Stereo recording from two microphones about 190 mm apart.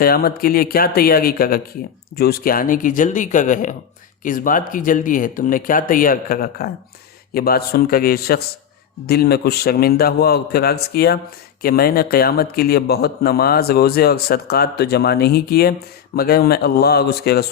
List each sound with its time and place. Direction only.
0.0 s a man's voice: 50° left (ahead or behind)